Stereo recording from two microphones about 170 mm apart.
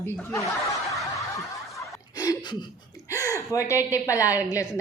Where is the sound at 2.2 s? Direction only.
20° left (ahead or behind).